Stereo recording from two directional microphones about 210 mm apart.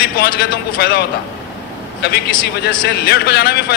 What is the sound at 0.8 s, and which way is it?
Speech, 50° left (ahead or behind).